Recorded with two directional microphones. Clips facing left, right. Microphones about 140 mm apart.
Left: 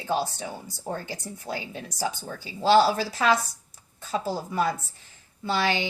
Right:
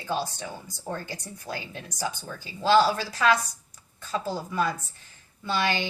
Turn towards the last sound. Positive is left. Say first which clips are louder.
# left 1 dB
turn(degrees=30)  # may be behind; listen again after turning